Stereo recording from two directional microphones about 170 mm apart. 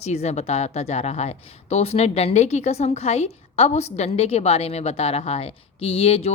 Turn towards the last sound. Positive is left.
turn(degrees=35)  # may be behind; listen again after turning